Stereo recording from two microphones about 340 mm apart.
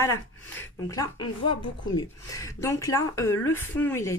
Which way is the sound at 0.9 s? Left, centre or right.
Centre.